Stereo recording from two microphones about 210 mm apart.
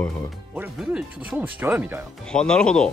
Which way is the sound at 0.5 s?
5° right (ahead or behind).